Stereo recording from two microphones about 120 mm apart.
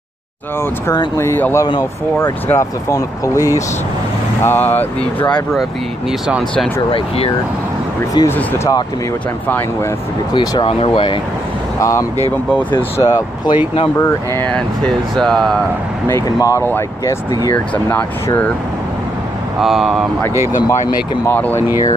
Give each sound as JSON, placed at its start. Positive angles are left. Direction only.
{"t": 1.1, "sound": "speech", "side_deg": 20}
{"t": 6.9, "sound": "speech", "side_deg": 50}
{"t": 8.2, "sound": "speech", "side_deg": 40}
{"t": 10.3, "sound": "speech", "side_deg": 35}
{"t": 10.7, "sound": "speech", "side_deg": 50}
{"t": 11.8, "sound": "speech", "side_deg": 25}
{"t": 14.5, "sound": "speech", "side_deg": 5}
{"t": 16.3, "sound": "speech", "side_deg": 30}
{"t": 17.8, "sound": "speech", "side_deg": 15}
{"t": 19.6, "sound": "speech", "side_deg": 0}
{"t": 21.3, "sound": "speech", "side_deg": 15}